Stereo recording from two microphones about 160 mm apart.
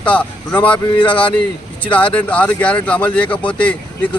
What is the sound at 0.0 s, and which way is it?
Speech, 10° left (ahead or behind).